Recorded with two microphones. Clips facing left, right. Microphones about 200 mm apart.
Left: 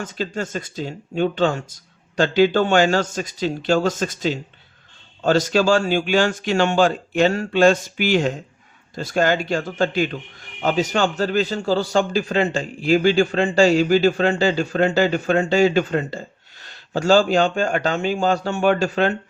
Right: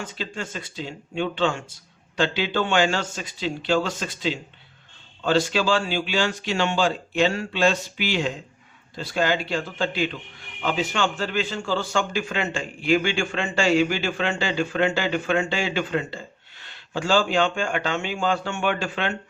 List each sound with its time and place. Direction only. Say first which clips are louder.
0.0 s a man's voice: left 6 dB; 45° left (ahead or behind)